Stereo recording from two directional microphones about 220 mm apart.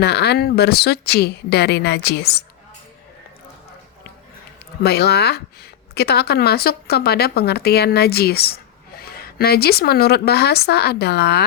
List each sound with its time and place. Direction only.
0.0 s speech: 50° left (ahead or behind)
4.8 s speech: 45° left (ahead or behind)